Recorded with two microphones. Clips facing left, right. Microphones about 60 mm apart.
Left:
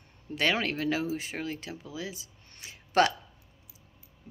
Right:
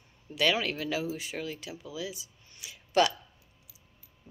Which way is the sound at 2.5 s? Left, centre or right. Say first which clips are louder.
Left 2 dB; left.